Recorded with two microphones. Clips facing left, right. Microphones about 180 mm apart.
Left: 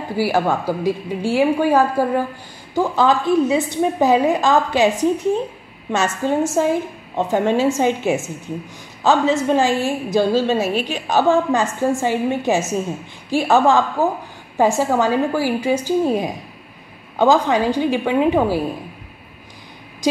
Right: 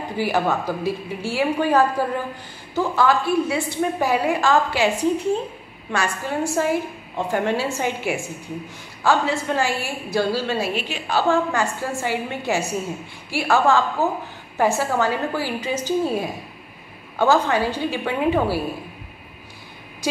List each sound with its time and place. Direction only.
0.2 s a woman's voice: 10° left (ahead or behind)
10.7 s a woman's voice: 45° left (ahead or behind)
11.1 s a woman's voice: 20° left (ahead or behind)